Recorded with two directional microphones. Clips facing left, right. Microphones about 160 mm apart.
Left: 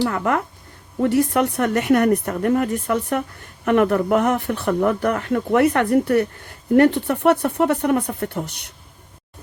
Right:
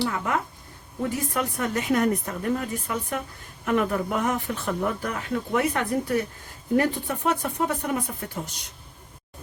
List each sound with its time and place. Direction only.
0.0 s a woman's voice: 60° left (ahead or behind)